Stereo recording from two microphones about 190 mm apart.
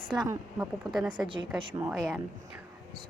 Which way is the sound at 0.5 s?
Centre (ahead or behind).